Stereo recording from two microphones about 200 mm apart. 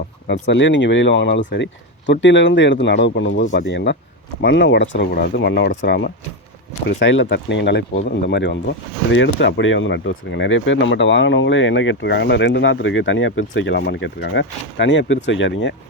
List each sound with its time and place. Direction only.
0.3 s speech: 65° left (ahead or behind)
6.8 s speech: 70° left (ahead or behind)